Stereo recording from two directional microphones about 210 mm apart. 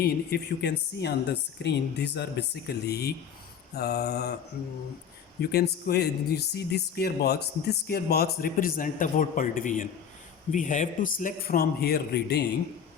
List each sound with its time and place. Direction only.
0.0 s speech: 50° left (ahead or behind)
5.4 s speech: 50° left (ahead or behind)